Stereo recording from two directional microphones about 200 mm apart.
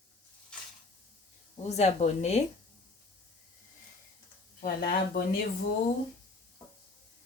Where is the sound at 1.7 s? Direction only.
35° left (ahead or behind).